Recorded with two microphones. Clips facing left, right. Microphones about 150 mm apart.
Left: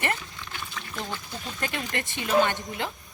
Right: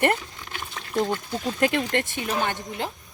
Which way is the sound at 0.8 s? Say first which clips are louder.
Right 11 dB; 45° right (ahead or behind).